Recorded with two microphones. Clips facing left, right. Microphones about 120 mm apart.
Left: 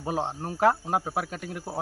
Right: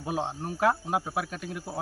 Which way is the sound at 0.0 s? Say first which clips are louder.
Left 2 dB; 35° left (ahead or behind).